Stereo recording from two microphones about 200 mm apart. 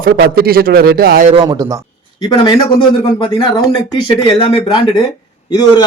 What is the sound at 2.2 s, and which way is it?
Speech, 20° left (ahead or behind).